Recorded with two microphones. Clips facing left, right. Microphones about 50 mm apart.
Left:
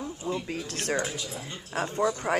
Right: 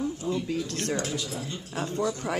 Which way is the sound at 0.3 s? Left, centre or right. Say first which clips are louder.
Even; left.